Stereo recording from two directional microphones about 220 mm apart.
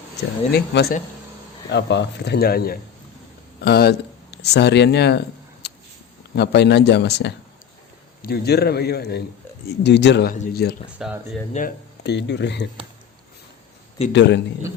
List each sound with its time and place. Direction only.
0.5 s speech: 50° left (ahead or behind)
5.6 s a sound: 50° left (ahead or behind)
6.3 s speech: 50° left (ahead or behind)
10.9 s speech: 5° right (ahead or behind)
11.5 s speech: 45° left (ahead or behind)
14.1 s speech: 55° left (ahead or behind)